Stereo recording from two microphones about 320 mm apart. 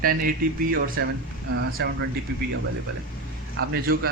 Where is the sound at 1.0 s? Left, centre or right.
Right.